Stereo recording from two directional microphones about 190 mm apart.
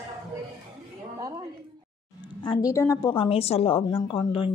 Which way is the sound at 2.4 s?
25° left (ahead or behind).